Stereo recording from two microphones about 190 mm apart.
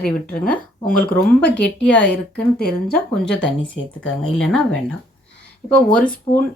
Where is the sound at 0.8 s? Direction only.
45° left (ahead or behind).